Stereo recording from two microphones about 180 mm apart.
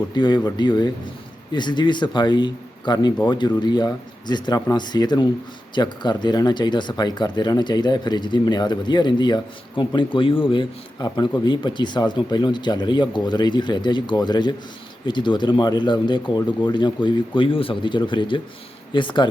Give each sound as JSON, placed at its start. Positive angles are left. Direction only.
{"t": 0.1, "sound": "speech", "side_deg": 25}